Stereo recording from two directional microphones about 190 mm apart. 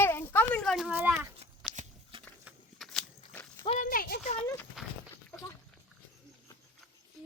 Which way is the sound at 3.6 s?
40° left (ahead or behind).